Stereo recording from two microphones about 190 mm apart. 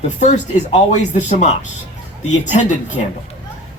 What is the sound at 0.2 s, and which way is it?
Speech, 40° left (ahead or behind).